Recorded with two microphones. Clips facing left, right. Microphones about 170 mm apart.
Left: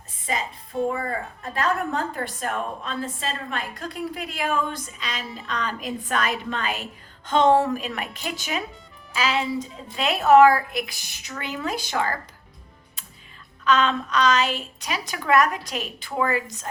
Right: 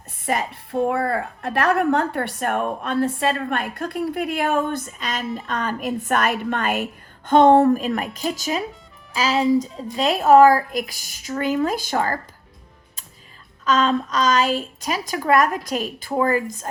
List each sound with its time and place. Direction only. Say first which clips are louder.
0.3 s a woman's voice: right 5 dB; 65° right (ahead or behind); by 12.2 s 40° right (ahead or behind)
13.7 s a woman's voice: right 2 dB; 40° right (ahead or behind)